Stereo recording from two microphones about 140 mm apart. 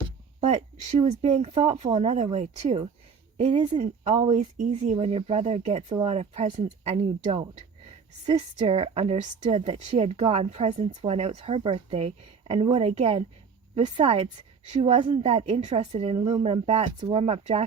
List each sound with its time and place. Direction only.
0.4 s a woman's voice: 50° right (ahead or behind)
16.1 s a woman's voice: 35° right (ahead or behind)